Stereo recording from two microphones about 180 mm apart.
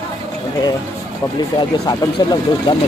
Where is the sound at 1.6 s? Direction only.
25° left (ahead or behind).